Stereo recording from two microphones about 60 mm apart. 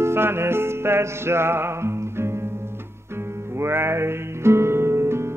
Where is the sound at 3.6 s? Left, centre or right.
Right.